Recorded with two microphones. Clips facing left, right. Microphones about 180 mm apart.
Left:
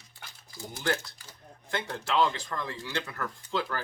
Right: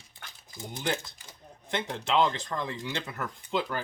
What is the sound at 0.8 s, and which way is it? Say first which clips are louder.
Speech: left 1 dB; 20° right (ahead or behind).